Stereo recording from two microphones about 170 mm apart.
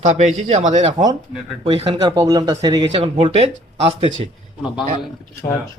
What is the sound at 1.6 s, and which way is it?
Speech, 35° right (ahead or behind).